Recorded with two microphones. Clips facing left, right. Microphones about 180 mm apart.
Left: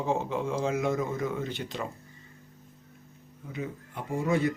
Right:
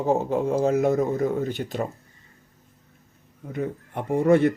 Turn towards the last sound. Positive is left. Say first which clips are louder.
# right 8 dB
turn(degrees=-60)  # may be behind; listen again after turning